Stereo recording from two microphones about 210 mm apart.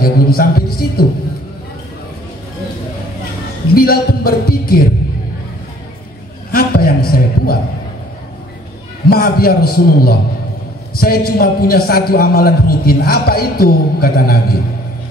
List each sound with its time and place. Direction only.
0.0 s a man's voice: 45° left (ahead or behind)
3.7 s music: 45° left (ahead or behind)
6.5 s a sound: 45° left (ahead or behind)
9.1 s a man's voice: 45° left (ahead or behind)